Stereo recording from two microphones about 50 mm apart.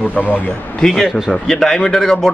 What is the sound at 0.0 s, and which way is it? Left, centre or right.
Speech, left.